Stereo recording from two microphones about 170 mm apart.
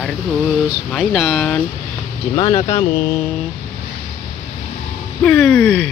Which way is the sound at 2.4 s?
30° left (ahead or behind).